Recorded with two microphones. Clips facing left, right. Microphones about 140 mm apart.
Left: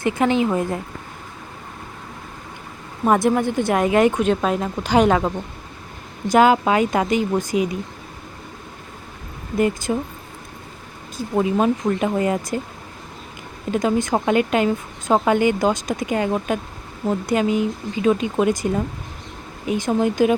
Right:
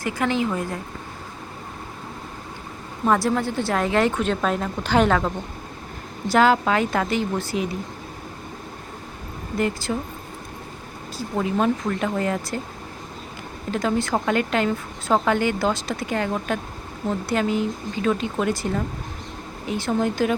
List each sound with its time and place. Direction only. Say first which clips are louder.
0.0 s speech: left 5 dB; 25° left (ahead or behind)
3.1 s speech: left 3 dB; 15° left (ahead or behind)
6.3 s speech: left 3 dB; 15° left (ahead or behind)
9.6 s speech: left 4 dB; 20° left (ahead or behind)
11.3 s speech: left 3 dB; 15° left (ahead or behind)
13.7 s speech: left 3 dB; 15° left (ahead or behind)